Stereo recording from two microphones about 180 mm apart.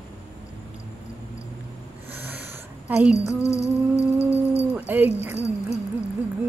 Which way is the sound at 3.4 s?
15° left (ahead or behind).